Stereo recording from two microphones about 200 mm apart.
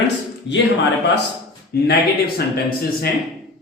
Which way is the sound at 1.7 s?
55° left (ahead or behind).